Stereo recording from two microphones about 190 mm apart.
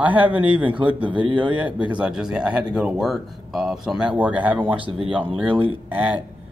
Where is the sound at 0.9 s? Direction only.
25° right (ahead or behind).